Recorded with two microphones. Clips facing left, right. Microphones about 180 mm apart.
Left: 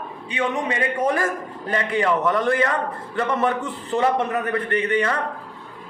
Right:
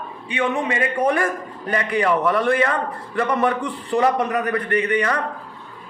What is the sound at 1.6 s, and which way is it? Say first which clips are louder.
A man's voice: right 1 dB; 25° left (ahead or behind).